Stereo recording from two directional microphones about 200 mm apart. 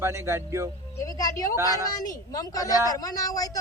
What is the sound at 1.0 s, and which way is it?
Speech, 15° left (ahead or behind).